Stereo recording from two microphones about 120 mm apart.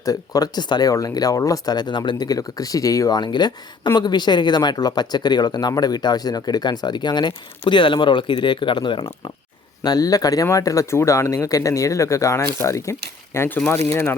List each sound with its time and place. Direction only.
0.0 s speech: 30° left (ahead or behind)